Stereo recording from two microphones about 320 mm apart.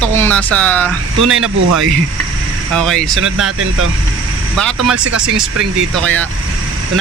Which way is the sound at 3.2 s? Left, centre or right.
Right.